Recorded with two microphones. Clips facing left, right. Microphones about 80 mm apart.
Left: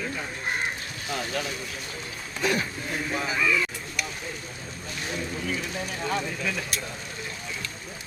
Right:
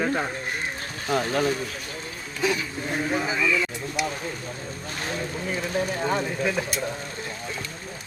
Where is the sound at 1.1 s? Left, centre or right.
Right.